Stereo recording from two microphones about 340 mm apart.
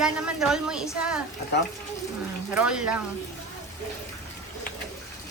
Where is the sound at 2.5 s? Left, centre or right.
Centre.